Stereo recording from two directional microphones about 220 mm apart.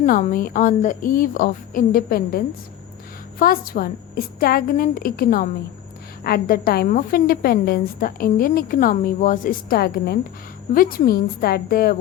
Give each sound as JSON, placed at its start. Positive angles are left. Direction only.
{"t": 0.0, "sound": "a woman's voice", "side_deg": 35}